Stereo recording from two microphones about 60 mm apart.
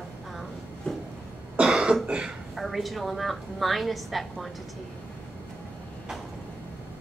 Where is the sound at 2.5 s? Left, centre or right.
Centre.